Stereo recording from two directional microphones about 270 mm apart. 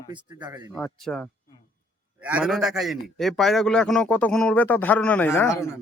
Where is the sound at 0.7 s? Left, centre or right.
Centre.